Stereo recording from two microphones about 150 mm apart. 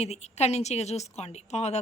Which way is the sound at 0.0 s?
45° left (ahead or behind).